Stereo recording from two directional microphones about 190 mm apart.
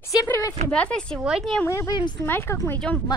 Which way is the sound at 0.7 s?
5° left (ahead or behind).